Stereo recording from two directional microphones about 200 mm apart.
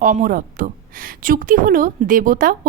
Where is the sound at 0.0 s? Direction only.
40° right (ahead or behind).